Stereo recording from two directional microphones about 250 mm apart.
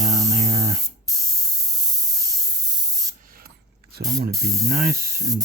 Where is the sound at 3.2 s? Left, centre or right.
Right.